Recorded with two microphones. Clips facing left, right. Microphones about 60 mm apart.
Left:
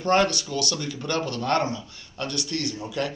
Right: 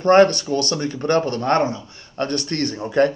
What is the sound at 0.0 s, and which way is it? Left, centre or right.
Speech, right.